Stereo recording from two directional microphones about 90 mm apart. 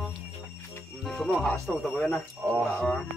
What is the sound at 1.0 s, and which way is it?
Speech, centre (ahead or behind).